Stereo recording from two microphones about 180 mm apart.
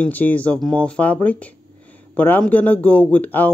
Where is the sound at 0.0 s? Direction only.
10° left (ahead or behind).